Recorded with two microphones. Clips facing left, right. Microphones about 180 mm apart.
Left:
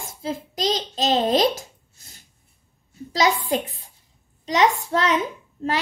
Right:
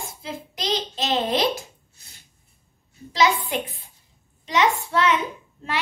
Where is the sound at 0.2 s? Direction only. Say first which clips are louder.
Left 8 dB; 40° left (ahead or behind).